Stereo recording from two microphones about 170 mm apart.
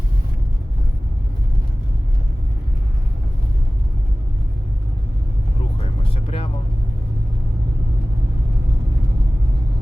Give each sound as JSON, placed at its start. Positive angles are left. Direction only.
{"t": 5.8, "sound": "vehicle", "side_deg": 30}